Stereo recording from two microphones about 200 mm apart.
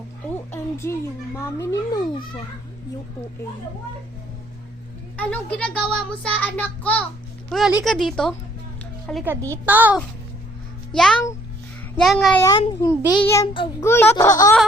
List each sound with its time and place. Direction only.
0.5 s a sound: 15° left (ahead or behind)
1.4 s a child's voice: 20° left (ahead or behind)
5.1 s child singing: 5° left (ahead or behind)
7.5 s speech: 5° right (ahead or behind)
9.2 s a woman's voice: 15° right (ahead or behind)
11.9 s speech: centre (ahead or behind)
12.4 s child singing: 15° left (ahead or behind)
13.1 s a child's voice: 20° left (ahead or behind)
13.8 s child singing: 10° left (ahead or behind)